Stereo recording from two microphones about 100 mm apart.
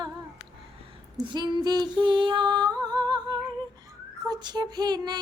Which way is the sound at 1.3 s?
45° right (ahead or behind).